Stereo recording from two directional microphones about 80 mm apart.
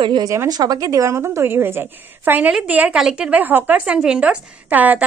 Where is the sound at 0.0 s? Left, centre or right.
Right.